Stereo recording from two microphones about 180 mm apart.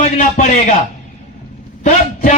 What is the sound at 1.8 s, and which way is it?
Speech, 50° left (ahead or behind).